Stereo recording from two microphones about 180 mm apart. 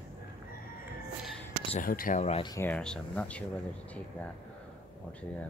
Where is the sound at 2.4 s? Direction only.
20° left (ahead or behind).